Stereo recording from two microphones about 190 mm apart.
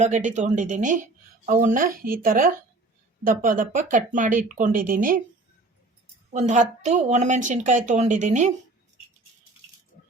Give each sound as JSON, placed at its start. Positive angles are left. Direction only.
{"t": 0.0, "sound": "a woman's voice", "side_deg": -40}
{"t": 6.3, "sound": "a woman's voice", "side_deg": -40}